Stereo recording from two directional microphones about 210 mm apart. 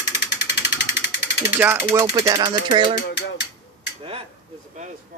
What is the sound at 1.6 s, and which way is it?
Speech, 10° right (ahead or behind).